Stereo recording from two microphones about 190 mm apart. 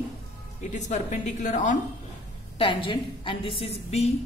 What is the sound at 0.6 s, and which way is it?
Speech, 40° left (ahead or behind).